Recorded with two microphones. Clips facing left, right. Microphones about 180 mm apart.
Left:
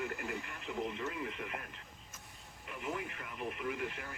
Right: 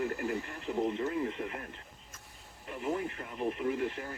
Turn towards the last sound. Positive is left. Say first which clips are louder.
# right 7 dB
turn(degrees=-35)  # may be behind; listen again after turning